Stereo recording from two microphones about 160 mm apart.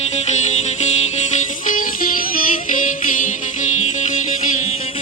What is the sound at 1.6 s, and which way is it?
Music, 60° left (ahead or behind).